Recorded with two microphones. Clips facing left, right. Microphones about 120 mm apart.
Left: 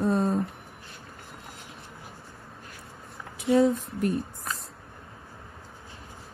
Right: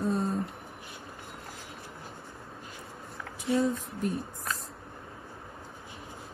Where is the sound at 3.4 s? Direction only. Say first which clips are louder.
Left 6 dB; 70° left (ahead or behind).